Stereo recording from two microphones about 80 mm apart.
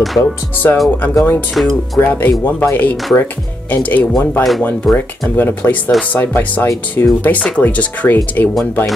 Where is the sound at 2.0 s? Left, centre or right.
Left.